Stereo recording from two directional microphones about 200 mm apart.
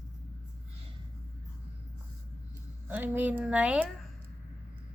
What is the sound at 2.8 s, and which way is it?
A woman's voice, 10° right (ahead or behind).